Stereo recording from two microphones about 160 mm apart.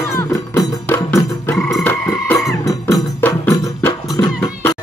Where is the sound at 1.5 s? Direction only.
5° left (ahead or behind).